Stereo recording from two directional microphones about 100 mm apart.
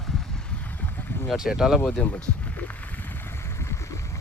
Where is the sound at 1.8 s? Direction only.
15° left (ahead or behind).